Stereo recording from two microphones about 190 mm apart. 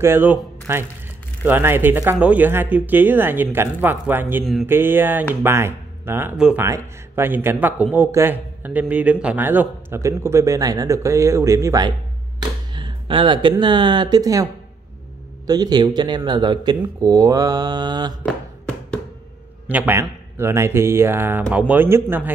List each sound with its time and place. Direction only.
0.0 s speech: 10° right (ahead or behind)
18.2 s music: 5° left (ahead or behind)
19.7 s speech: 10° right (ahead or behind)